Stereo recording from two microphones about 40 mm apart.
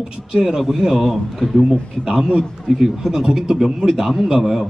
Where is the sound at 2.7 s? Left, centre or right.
Centre.